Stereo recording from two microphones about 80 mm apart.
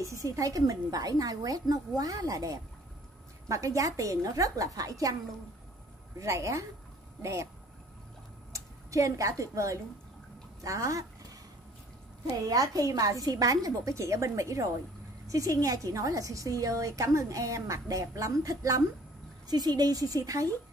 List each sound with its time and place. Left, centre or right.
0.0 s a woman's voice: right
6.1 s a woman's voice: right
8.5 s a woman's voice: right
12.3 s a woman's voice: right
19.4 s a woman's voice: right